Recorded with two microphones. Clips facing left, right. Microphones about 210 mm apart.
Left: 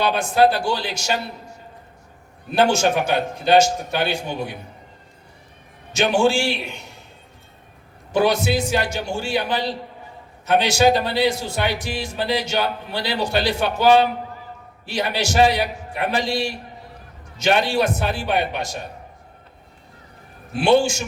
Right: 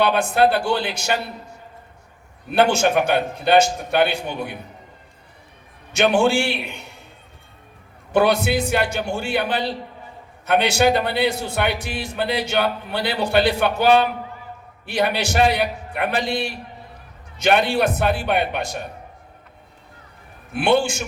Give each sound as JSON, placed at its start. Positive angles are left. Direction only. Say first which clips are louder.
{"t": 0.0, "sound": "a man's voice", "louder": "even", "side_deg": -55}
{"t": 2.5, "sound": "a man's voice", "louder": "even", "side_deg": -55}
{"t": 5.9, "sound": "a man's voice", "louder": "right 1 dB", "side_deg": -60}
{"t": 8.1, "sound": "a man's voice", "louder": "right 1 dB", "side_deg": -55}
{"t": 20.5, "sound": "a man's voice", "louder": "left 2 dB", "side_deg": -55}